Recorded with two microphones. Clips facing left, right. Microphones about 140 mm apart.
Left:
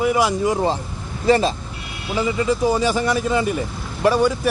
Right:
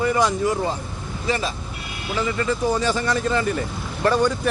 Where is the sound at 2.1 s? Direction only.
15° left (ahead or behind).